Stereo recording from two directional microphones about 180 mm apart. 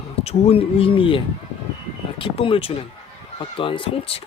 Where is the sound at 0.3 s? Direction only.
35° left (ahead or behind).